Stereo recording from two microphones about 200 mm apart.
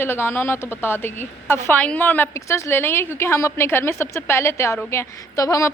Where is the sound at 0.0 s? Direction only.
10° left (ahead or behind).